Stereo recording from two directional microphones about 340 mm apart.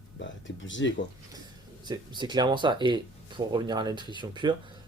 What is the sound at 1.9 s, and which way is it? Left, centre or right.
Speech, centre.